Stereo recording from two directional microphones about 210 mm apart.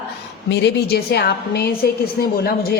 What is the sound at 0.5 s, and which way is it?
A woman's voice, 50° left (ahead or behind).